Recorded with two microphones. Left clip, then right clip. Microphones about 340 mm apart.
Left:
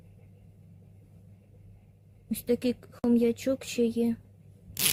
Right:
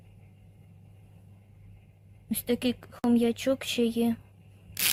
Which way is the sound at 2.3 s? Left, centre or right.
Centre.